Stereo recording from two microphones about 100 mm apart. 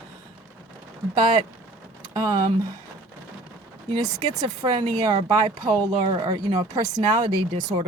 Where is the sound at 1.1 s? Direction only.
50° right (ahead or behind).